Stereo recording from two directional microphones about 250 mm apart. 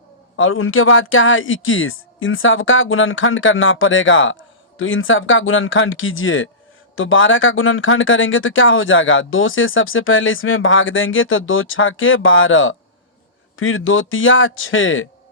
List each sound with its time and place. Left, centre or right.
0.3 s speech: left